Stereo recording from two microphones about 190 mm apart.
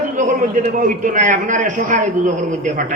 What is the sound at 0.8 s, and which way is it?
A woman's voice, 40° right (ahead or behind).